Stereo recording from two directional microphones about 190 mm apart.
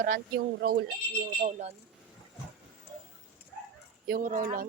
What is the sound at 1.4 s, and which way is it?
Speech, 40° right (ahead or behind).